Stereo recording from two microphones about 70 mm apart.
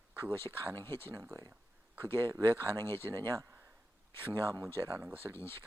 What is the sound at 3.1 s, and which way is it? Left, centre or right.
Speech, right.